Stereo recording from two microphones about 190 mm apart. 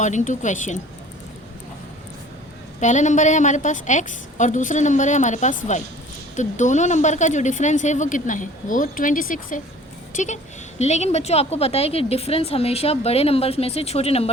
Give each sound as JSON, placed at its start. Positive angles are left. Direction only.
{"t": 0.0, "sound": "speech", "side_deg": 40}
{"t": 2.8, "sound": "speech", "side_deg": 40}